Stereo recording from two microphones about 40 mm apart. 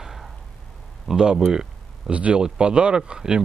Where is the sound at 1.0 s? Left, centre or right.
Centre.